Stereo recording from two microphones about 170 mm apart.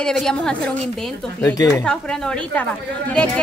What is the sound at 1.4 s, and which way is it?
Speech, 20° left (ahead or behind).